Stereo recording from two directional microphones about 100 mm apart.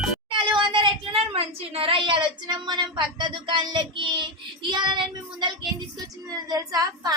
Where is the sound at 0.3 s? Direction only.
55° right (ahead or behind).